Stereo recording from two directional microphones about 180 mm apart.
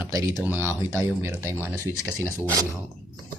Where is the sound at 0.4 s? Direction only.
10° right (ahead or behind).